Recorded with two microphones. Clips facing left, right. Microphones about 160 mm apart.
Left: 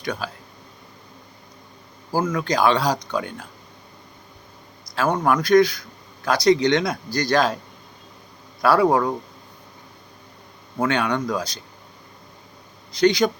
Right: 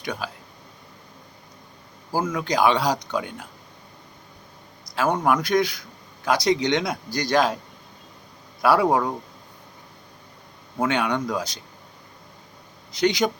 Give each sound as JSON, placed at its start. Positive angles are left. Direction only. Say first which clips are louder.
{"t": 0.0, "sound": "speech", "louder": "left 2 dB", "side_deg": -15}
{"t": 2.1, "sound": "speech", "louder": "left 1 dB", "side_deg": -15}
{"t": 4.9, "sound": "a sound", "louder": "left 1 dB", "side_deg": -45}
{"t": 5.2, "sound": "speech", "louder": "left 8 dB", "side_deg": -15}
{"t": 8.6, "sound": "speech", "louder": "left 2 dB", "side_deg": -15}
{"t": 10.8, "sound": "speech", "louder": "left 1 dB", "side_deg": -15}
{"t": 13.0, "sound": "speech", "louder": "left 4 dB", "side_deg": -15}